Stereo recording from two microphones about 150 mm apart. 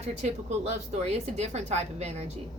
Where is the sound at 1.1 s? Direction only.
45° right (ahead or behind).